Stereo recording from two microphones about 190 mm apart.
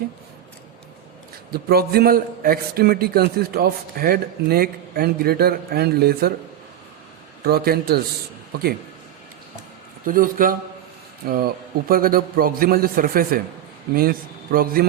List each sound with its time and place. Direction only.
1.5 s a man's voice: 55° right (ahead or behind)
7.4 s a man's voice: 55° right (ahead or behind)
10.1 s a man's voice: 45° right (ahead or behind)